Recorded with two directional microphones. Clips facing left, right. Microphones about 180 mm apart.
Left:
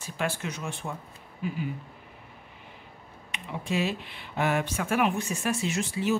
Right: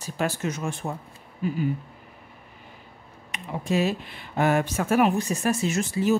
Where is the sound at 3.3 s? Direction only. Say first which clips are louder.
Right 5 dB; 45° right (ahead or behind).